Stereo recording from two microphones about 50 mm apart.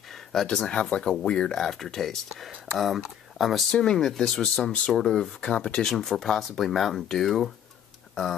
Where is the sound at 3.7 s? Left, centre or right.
Centre.